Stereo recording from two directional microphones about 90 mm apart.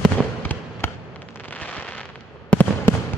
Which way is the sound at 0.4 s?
25° left (ahead or behind).